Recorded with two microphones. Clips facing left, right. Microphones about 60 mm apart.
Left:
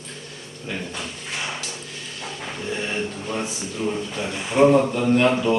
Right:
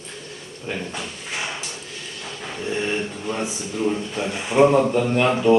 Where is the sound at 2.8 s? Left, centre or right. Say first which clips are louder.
Right 3 dB; centre.